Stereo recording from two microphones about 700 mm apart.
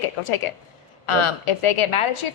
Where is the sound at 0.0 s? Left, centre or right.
Left.